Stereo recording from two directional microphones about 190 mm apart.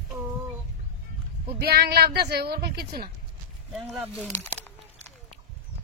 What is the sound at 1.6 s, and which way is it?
Speech, 55° right (ahead or behind).